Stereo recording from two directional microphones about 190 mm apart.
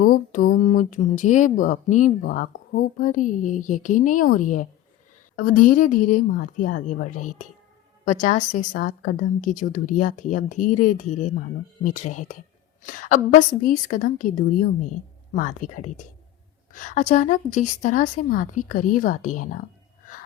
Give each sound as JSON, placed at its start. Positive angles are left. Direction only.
{"t": 0.0, "sound": "a woman's voice", "side_deg": 45}